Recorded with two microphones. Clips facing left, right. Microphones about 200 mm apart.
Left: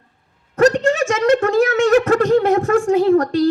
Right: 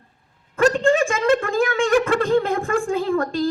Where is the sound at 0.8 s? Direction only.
80° left.